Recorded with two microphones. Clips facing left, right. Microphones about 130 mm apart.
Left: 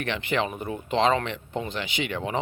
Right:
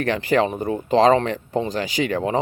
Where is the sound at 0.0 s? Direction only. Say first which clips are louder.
Right 8 dB; 40° right (ahead or behind).